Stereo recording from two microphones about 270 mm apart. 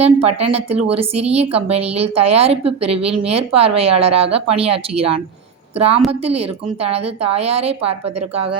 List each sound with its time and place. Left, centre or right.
0.0 s speech: right
5.7 s a woman's voice: right